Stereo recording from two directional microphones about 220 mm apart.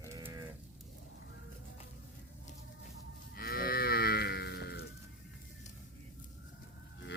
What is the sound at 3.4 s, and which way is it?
Moo, 40° left (ahead or behind).